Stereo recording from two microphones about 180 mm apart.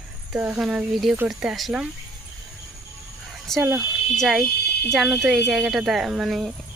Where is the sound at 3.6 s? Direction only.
10° right (ahead or behind).